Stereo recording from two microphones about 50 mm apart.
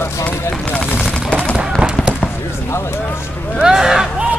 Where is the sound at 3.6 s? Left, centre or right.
Centre.